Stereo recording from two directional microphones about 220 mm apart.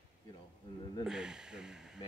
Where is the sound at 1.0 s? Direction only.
5° right (ahead or behind).